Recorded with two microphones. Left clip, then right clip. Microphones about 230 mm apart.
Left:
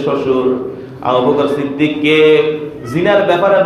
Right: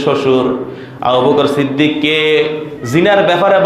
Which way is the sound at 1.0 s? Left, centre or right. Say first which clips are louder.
Right 2 dB; right.